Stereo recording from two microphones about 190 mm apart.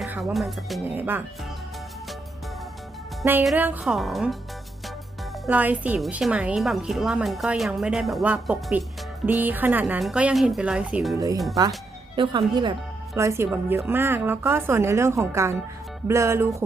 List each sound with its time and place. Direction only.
0.0 s a woman's voice: 5° right (ahead or behind)
3.4 s a woman's voice: 5° right (ahead or behind)
5.5 s a woman's voice: 10° right (ahead or behind)
11.1 s a woman's voice: 20° right (ahead or behind)